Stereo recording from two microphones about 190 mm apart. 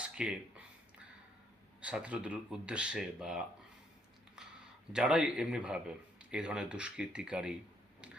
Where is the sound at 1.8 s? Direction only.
5° right (ahead or behind).